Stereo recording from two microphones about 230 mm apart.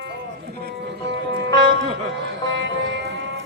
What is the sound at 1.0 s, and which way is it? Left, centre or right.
Music, right.